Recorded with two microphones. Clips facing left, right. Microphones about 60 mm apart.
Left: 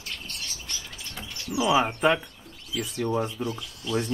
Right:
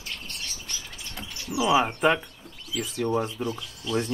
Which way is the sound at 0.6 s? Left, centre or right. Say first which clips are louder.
Even; centre.